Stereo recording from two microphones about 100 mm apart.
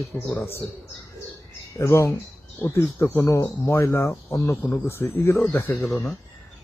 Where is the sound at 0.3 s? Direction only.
25° left (ahead or behind).